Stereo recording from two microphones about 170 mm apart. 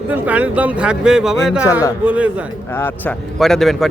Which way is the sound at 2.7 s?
15° left (ahead or behind).